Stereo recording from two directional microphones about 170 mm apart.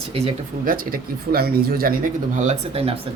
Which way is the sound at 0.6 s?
55° right (ahead or behind).